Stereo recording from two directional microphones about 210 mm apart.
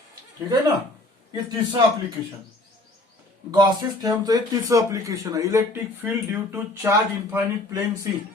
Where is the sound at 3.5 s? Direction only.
20° right (ahead or behind).